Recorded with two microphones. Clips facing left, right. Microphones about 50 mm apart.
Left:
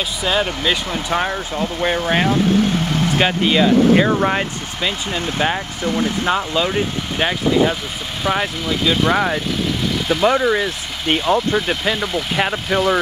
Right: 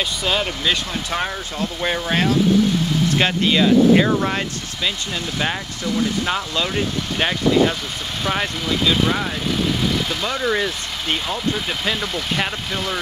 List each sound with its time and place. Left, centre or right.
0.2 s speech: centre
9.1 s speech: left
10.4 s speech: centre
11.1 s speech: centre